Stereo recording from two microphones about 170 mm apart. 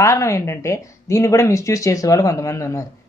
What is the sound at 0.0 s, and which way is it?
Speech, 15° left (ahead or behind).